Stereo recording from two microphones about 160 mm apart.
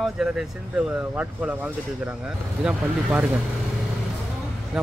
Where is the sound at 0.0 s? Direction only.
5° right (ahead or behind).